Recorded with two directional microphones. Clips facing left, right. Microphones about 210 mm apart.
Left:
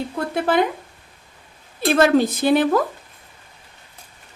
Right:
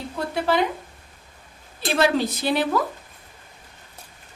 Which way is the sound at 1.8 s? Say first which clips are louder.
Left 5 dB; 50° left (ahead or behind).